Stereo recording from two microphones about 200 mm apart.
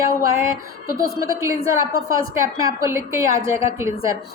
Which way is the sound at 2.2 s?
15° right (ahead or behind).